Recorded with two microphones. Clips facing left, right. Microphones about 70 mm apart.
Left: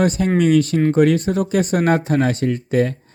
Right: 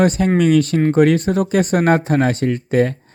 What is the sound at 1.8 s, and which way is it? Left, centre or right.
Speech, right.